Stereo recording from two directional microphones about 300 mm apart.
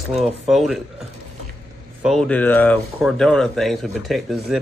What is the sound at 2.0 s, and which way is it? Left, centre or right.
Speech, centre.